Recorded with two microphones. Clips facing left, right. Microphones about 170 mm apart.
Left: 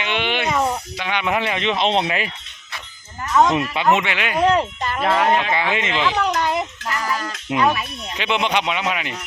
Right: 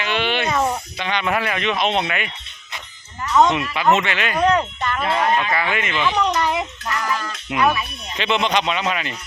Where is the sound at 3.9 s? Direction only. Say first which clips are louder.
Right 1 dB; 15° left (ahead or behind).